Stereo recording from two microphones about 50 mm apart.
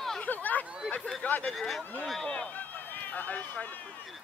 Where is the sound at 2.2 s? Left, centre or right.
Centre.